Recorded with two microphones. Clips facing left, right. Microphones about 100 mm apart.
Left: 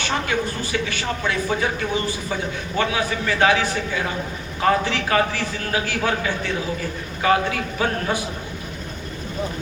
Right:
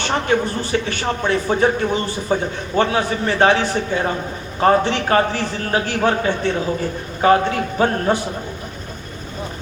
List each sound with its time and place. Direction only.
0.1 s speech: 40° right (ahead or behind)